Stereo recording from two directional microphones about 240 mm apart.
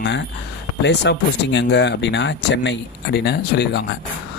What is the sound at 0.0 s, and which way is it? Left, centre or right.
Speech, left.